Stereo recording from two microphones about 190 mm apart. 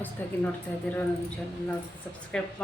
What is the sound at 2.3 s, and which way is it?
Speech, 5° left (ahead or behind).